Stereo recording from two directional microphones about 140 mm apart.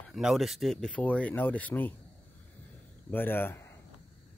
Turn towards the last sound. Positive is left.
turn(degrees=15)  # may be behind; listen again after turning